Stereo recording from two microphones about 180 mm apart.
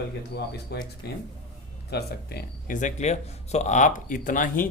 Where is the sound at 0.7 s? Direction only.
65° left (ahead or behind).